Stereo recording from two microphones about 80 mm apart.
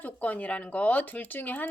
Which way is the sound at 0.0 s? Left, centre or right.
Centre.